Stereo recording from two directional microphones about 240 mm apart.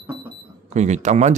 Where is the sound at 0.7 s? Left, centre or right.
Right.